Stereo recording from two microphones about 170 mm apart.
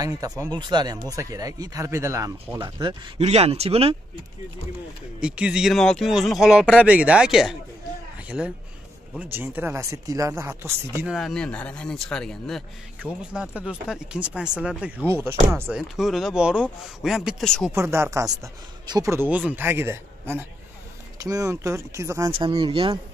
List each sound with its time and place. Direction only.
0.0 s speech: 20° right (ahead or behind)
2.6 s speech: 30° right (ahead or behind)
5.2 s speech: 5° right (ahead or behind)
9.1 s speech: 10° right (ahead or behind)
11.1 s speech: centre (ahead or behind)
16.0 s speech: centre (ahead or behind)
17.7 s speech: 15° right (ahead or behind)
22.3 s speech: 30° right (ahead or behind)